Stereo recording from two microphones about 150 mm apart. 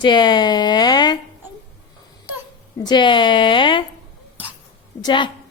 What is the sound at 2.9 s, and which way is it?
Speech, 30° left (ahead or behind).